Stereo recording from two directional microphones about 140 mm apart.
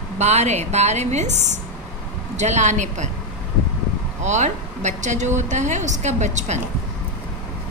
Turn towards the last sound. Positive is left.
turn(degrees=-55)  # may be behind; listen again after turning